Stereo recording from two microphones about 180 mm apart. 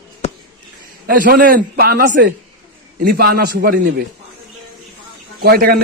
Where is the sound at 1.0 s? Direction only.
50° right (ahead or behind); by 4.0 s 70° right (ahead or behind).